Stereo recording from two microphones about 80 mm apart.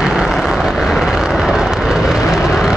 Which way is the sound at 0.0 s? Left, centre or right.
Centre.